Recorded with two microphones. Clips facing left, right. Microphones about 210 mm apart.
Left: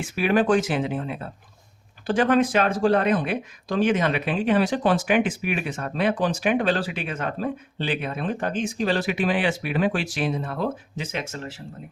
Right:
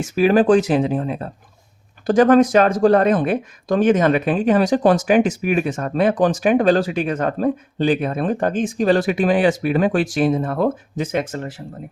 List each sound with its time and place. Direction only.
0.2 s speech: 35° right (ahead or behind)